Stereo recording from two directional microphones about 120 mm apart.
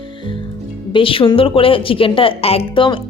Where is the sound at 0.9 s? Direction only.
45° left (ahead or behind).